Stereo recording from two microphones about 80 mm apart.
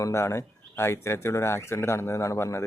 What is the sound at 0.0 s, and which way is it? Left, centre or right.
Speech, left.